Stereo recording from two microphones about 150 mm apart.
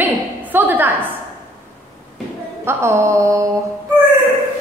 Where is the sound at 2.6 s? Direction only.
20° right (ahead or behind).